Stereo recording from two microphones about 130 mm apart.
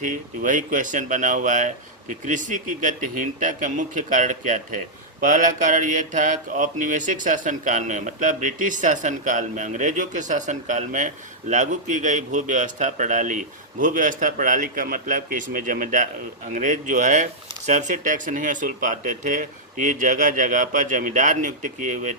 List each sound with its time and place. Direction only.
0.0 s speech: 90° right; by 4.6 s 75° right (ahead or behind)
5.2 s mantra: 85° right
16.5 s mantra: 75° right (ahead or behind)
17.7 s speech: 70° right (ahead or behind)